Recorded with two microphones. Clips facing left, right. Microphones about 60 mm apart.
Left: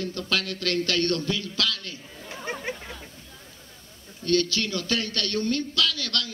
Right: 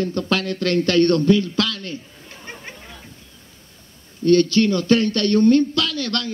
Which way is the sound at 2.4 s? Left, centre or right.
Centre.